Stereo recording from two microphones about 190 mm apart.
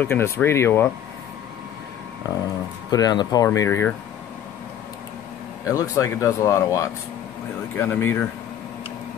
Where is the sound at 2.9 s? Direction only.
20° left (ahead or behind).